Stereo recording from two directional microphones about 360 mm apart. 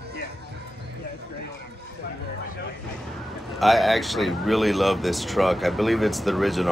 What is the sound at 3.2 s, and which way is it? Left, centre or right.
Speech, centre.